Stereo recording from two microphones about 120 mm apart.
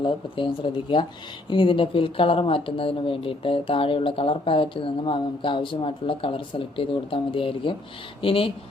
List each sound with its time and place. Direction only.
0.0 s speech: 45° left (ahead or behind)